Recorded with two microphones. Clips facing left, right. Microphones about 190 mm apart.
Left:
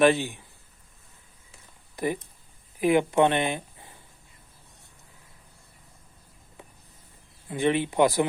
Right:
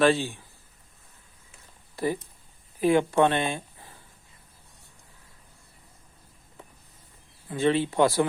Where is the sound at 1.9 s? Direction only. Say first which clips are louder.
Right 1 dB; 15° left (ahead or behind).